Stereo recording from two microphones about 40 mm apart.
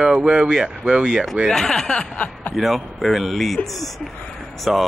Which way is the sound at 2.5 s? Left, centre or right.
Centre.